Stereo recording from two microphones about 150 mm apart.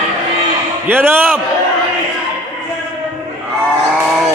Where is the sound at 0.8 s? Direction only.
15° right (ahead or behind).